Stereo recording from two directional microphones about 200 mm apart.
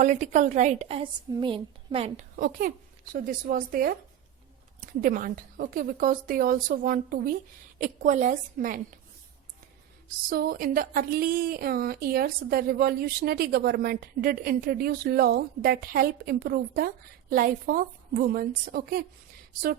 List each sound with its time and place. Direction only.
0.0 s a woman's voice: 40° right (ahead or behind)
2.3 s a woman's voice: 45° right (ahead or behind)
10.2 s a woman's voice: 45° right (ahead or behind)